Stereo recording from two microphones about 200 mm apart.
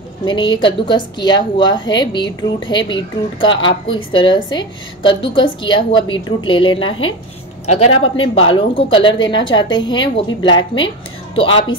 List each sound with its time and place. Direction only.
0.2 s a woman's voice: 25° left (ahead or behind)